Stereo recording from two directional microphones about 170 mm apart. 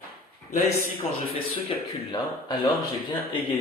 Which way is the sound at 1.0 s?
40° left (ahead or behind).